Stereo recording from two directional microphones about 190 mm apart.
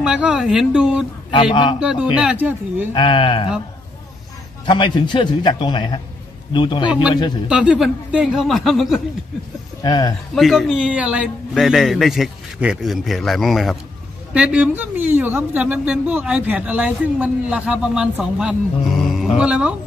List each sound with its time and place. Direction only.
0.0 s a man's voice: 5° right (ahead or behind)
1.3 s a man's voice: 25° left (ahead or behind)
1.8 s a man's voice: 5° right (ahead or behind)
2.9 s a man's voice: 25° left (ahead or behind)
4.6 s a man's voice: 25° left (ahead or behind)
6.9 s a man's voice: 5° right (ahead or behind)
9.8 s a man's voice: 20° left (ahead or behind)
10.3 s a man's voice: centre (ahead or behind)